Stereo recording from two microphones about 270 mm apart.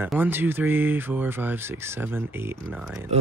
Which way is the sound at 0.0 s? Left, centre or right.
Centre.